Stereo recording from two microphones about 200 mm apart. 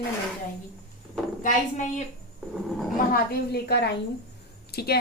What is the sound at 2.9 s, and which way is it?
Speech, 45° left (ahead or behind).